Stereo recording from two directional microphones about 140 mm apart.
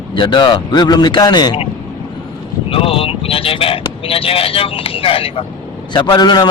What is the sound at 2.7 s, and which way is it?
Speech, 40° left (ahead or behind).